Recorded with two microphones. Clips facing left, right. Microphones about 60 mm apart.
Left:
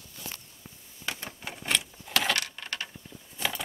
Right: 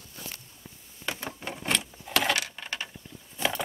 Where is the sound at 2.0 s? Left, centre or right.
Centre.